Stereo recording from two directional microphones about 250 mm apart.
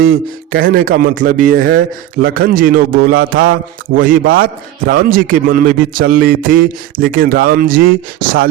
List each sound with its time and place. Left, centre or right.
0.5 s a man's voice: right